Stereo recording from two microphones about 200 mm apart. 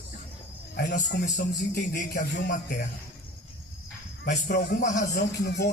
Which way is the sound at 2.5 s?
40° left (ahead or behind).